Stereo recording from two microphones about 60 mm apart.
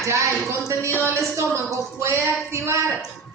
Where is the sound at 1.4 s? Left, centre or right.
Right.